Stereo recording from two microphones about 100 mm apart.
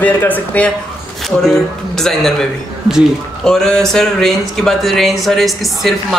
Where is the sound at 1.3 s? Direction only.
5° left (ahead or behind).